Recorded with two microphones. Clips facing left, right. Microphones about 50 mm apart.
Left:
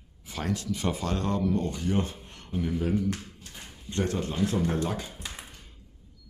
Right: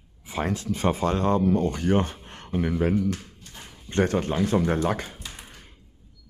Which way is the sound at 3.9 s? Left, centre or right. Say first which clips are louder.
Right 6 dB; right.